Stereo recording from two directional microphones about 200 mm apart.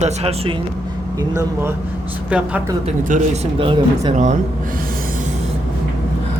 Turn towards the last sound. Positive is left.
turn(degrees=-45)  # may be behind; listen again after turning